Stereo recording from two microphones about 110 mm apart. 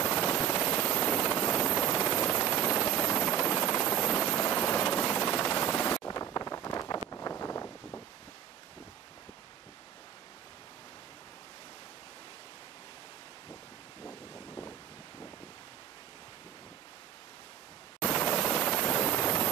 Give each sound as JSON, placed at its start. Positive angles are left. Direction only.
{"t": 0.0, "sound": "helicopter", "side_deg": 25}
{"t": 1.8, "sound": "helicopter", "side_deg": 35}
{"t": 6.0, "sound": "wind", "side_deg": 30}
{"t": 7.1, "sound": "vehicle", "side_deg": 30}
{"t": 14.0, "sound": "wind noise", "side_deg": 20}
{"t": 18.0, "sound": "a sound", "side_deg": 25}
{"t": 18.5, "sound": "helicopter", "side_deg": 15}